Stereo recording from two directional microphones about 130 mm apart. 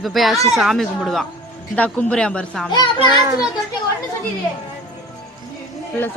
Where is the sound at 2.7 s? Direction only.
35° left (ahead or behind).